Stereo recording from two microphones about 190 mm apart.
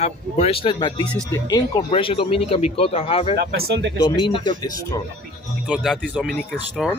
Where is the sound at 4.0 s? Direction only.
25° left (ahead or behind).